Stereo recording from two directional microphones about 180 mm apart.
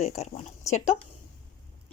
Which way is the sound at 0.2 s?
35° left (ahead or behind).